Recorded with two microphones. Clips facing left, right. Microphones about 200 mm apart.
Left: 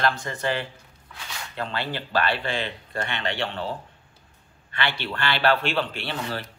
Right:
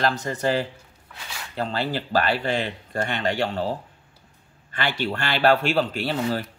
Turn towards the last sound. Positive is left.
turn(degrees=-40)  # may be behind; listen again after turning